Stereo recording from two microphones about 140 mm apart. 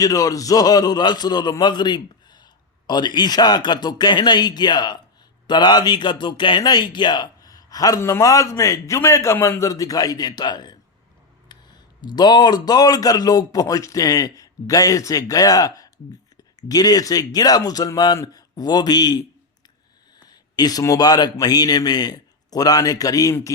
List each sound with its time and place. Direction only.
0.0 s a man's voice: 25° left (ahead or behind)
12.0 s a man's voice: 30° left (ahead or behind)